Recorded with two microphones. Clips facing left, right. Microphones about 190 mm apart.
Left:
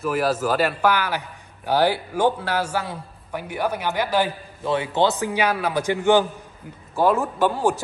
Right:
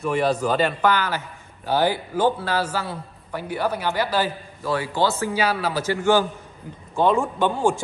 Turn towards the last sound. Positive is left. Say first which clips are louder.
# even
turn(degrees=5)  # may be behind; listen again after turning